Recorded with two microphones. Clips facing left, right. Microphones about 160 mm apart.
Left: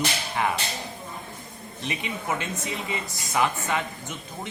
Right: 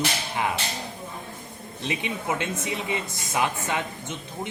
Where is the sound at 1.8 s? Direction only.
20° right (ahead or behind).